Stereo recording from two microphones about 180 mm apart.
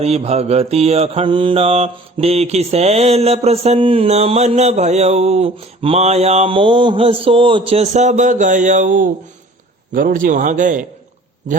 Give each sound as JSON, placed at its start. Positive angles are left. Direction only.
{"t": 0.0, "sound": "mantra", "side_deg": -35}
{"t": 9.9, "sound": "speech", "side_deg": -50}